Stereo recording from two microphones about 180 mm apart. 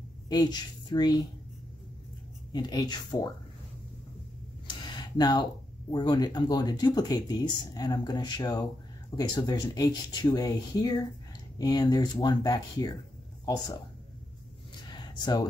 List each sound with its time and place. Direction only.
0.3 s a woman's voice: 25° left (ahead or behind)
2.5 s speech: 20° left (ahead or behind)
4.6 s speech: 25° left (ahead or behind)
14.9 s a sound: 25° left (ahead or behind)